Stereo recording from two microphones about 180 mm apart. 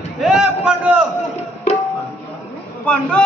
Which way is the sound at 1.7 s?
35° left (ahead or behind).